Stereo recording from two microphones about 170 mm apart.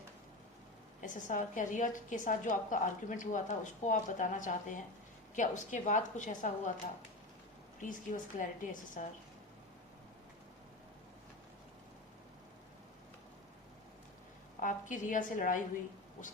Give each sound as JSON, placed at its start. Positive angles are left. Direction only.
{"t": 1.0, "sound": "a woman's voice", "side_deg": 50}
{"t": 7.8, "sound": "a woman's voice", "side_deg": 50}
{"t": 14.6, "sound": "a woman's voice", "side_deg": 50}